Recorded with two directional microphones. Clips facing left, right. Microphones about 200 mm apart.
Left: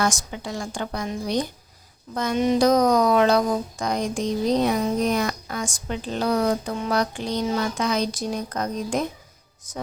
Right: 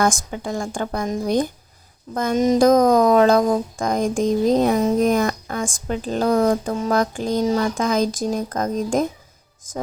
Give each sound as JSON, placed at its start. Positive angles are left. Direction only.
{"t": 0.0, "sound": "speech", "side_deg": -50}